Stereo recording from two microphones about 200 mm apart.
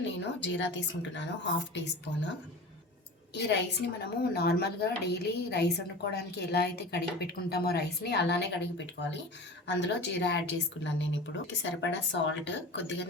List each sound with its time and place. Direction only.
0.0 s a woman's voice: 65° left (ahead or behind)
3.3 s a woman's voice: 55° left (ahead or behind)